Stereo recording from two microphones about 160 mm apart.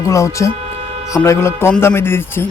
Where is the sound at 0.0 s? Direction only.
20° left (ahead or behind).